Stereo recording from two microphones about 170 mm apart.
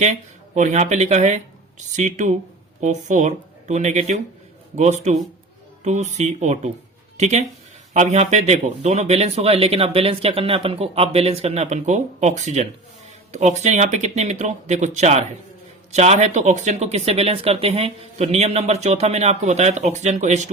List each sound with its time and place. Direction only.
0.0 s speech: 45° right (ahead or behind)